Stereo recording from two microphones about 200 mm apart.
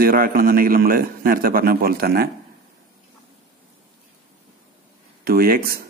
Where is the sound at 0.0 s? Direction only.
45° right (ahead or behind).